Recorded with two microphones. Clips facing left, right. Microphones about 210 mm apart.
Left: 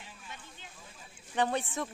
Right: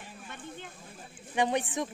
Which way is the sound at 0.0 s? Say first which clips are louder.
Right 6 dB; 55° right (ahead or behind).